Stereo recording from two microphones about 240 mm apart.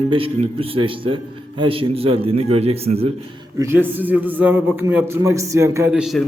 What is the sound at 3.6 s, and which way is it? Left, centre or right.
A man's voice, centre.